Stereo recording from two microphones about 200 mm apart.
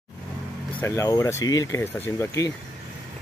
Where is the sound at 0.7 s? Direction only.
15° left (ahead or behind).